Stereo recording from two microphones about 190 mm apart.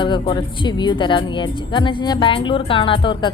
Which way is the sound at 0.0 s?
25° left (ahead or behind).